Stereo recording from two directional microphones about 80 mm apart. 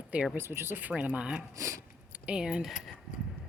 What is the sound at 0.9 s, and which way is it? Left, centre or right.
Speech, centre.